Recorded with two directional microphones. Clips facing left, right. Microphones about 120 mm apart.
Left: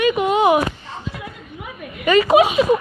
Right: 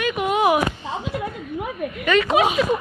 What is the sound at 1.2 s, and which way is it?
Chuckle, 45° right (ahead or behind).